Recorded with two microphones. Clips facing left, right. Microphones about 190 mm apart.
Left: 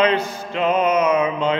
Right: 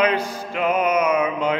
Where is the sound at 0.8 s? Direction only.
10° right (ahead or behind).